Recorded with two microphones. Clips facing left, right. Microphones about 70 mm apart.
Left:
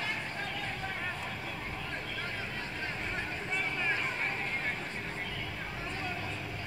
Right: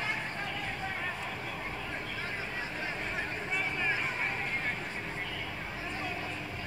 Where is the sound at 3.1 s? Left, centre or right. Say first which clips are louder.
Right 1 dB; centre.